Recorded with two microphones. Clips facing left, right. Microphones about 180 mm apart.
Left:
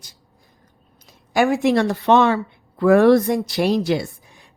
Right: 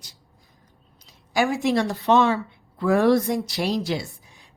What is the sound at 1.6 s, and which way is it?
Speech, 60° left (ahead or behind).